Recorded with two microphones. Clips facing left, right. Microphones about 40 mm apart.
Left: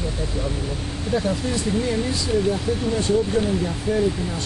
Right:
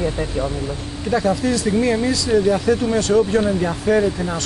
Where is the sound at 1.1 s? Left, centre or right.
Right.